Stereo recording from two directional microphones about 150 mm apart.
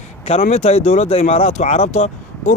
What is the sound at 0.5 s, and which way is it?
Speech, 45° left (ahead or behind).